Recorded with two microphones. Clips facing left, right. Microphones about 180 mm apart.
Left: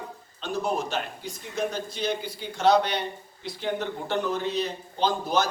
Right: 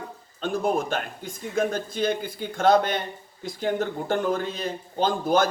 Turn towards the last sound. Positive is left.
turn(degrees=-50)  # may be behind; listen again after turning